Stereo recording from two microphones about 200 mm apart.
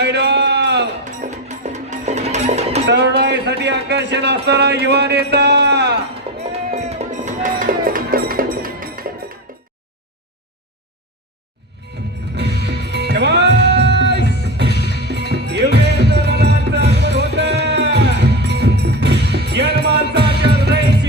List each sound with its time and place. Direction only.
0.0 s a sound: 60° right (ahead or behind)
1.2 s music: 35° right (ahead or behind)
2.8 s a sound: 55° right (ahead or behind)
4.4 s speech: 55° right (ahead or behind)
6.3 s music: 30° right (ahead or behind); by 9.0 s 45° right (ahead or behind)
9.5 s a sound: 45° right (ahead or behind)
12.4 s music: 55° right (ahead or behind)
14.7 s music: 55° left (ahead or behind)
15.0 s music: 55° right (ahead or behind)